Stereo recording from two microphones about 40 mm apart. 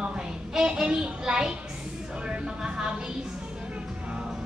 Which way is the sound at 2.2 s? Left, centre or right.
Right.